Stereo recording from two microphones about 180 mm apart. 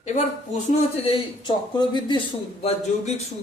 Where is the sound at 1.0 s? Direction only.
25° left (ahead or behind).